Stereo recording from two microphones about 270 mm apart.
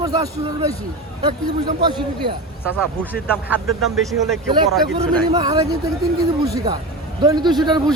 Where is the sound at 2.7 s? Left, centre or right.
Centre.